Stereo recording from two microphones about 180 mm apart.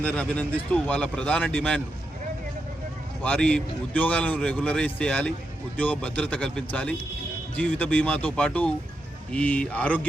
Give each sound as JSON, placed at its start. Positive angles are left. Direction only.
{"t": 0.0, "sound": "a man's voice", "side_deg": 5}
{"t": 3.2, "sound": "a man's voice", "side_deg": 5}